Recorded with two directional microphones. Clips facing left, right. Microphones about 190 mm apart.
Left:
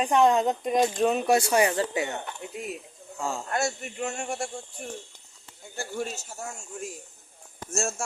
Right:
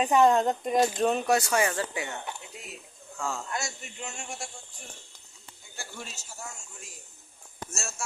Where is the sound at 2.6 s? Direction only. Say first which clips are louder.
Left 10 dB; 55° left (ahead or behind).